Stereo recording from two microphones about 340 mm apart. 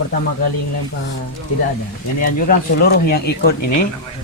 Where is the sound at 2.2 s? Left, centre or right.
Left.